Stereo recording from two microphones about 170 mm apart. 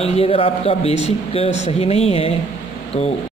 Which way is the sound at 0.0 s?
35° left (ahead or behind).